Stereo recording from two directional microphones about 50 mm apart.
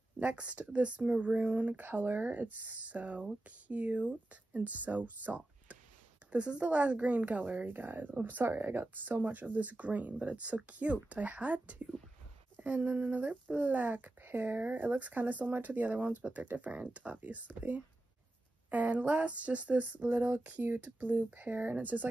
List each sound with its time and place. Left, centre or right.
0.2 s speech: right
1.8 s speech: right
6.3 s speech: centre; by 8.5 s right
8.5 s speech: right